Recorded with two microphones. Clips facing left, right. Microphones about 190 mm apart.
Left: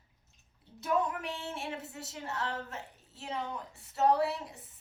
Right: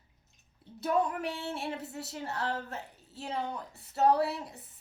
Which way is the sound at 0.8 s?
35° right (ahead or behind).